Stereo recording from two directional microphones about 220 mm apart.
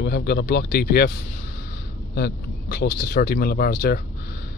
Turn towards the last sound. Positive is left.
turn(degrees=45)  # may be behind; listen again after turning